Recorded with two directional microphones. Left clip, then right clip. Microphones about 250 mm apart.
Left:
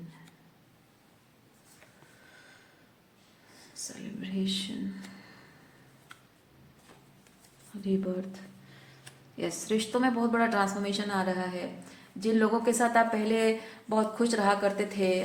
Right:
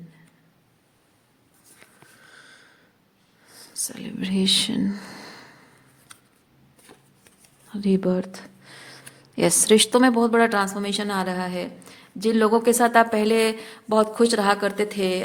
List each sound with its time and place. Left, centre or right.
3.8 s speech: right
7.7 s a woman's voice: right